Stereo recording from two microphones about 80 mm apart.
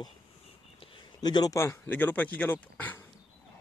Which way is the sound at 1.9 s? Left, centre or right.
Left.